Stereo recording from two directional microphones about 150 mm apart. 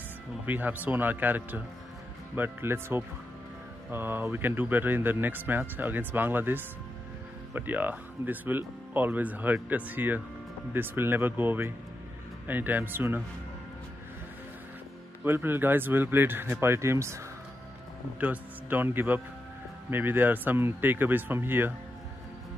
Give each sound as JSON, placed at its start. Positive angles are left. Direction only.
{"t": 0.5, "sound": "speech", "side_deg": -10}
{"t": 15.2, "sound": "speech", "side_deg": -15}
{"t": 18.2, "sound": "speech", "side_deg": -10}